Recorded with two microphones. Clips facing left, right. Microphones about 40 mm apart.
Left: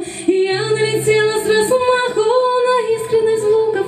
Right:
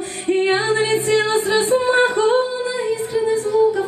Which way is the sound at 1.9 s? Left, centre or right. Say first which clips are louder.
Even; right.